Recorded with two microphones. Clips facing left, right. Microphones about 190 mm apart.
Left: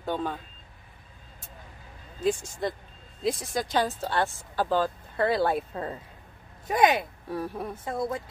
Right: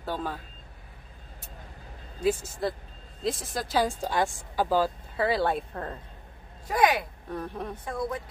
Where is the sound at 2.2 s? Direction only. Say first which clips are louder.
Even; 5° right (ahead or behind).